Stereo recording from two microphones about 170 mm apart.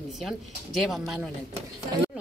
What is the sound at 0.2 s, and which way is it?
Speech, centre (ahead or behind).